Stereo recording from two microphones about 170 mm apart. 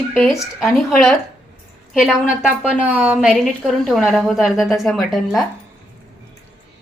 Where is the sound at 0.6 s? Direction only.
Centre (ahead or behind).